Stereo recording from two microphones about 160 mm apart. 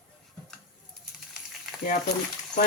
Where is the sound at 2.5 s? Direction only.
5° left (ahead or behind).